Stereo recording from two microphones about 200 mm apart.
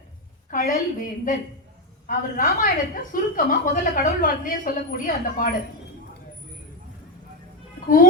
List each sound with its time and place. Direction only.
0.5 s a woman's voice: 45° left (ahead or behind)